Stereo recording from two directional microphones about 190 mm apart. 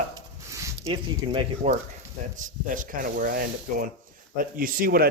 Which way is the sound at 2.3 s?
45° right (ahead or behind).